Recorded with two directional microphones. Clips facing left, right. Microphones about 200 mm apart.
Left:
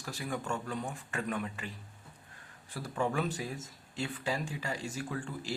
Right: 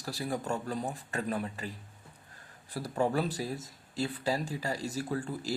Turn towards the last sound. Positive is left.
turn(degrees=-40)  # may be behind; listen again after turning